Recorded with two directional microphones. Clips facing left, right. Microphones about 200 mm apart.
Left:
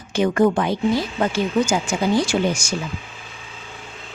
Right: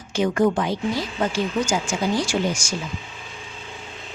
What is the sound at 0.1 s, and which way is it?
Speech, 60° left (ahead or behind).